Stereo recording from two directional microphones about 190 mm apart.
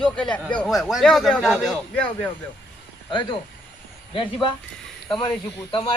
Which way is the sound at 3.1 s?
25° left (ahead or behind).